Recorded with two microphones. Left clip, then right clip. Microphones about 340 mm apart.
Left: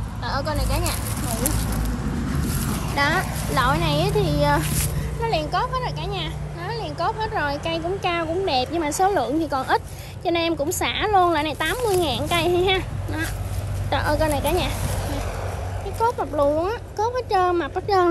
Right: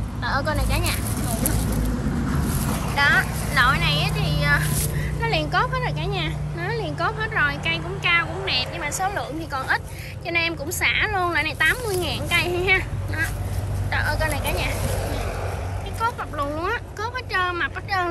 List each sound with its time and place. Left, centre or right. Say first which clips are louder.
0.3 s speech: right 1 dB; centre
3.0 s a sound: right 3 dB; centre
4.6 s speech: even; centre
16.0 s speech: left 5 dB; centre